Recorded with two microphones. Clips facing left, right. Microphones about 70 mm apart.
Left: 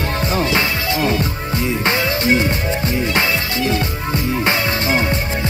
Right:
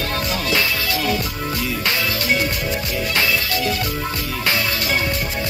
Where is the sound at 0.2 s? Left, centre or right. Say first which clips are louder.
Left 5 dB; left.